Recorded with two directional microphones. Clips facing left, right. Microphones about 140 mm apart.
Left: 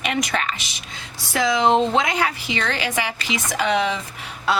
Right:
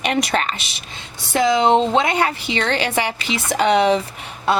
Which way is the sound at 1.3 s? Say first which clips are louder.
Right 3 dB; 30° right (ahead or behind).